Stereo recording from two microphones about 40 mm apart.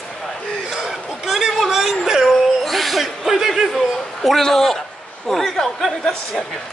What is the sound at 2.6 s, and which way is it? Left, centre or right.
Chuckle, centre.